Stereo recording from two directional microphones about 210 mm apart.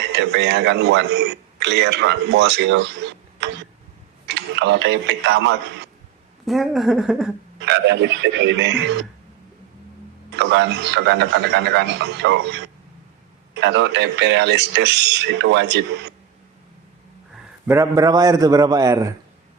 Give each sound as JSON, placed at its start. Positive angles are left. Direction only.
{"t": 0.1, "sound": "a man's voice", "side_deg": -55}
{"t": 6.4, "sound": "a woman's voice", "side_deg": 0}
{"t": 7.6, "sound": "speech", "side_deg": -55}
{"t": 10.3, "sound": "speech", "side_deg": -55}
{"t": 17.7, "sound": "a man's voice", "side_deg": -15}